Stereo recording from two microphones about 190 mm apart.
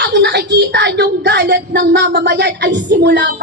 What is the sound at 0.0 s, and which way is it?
A woman's voice, 65° right (ahead or behind).